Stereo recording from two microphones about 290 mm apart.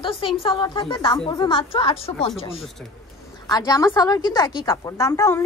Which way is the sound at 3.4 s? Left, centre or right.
Centre.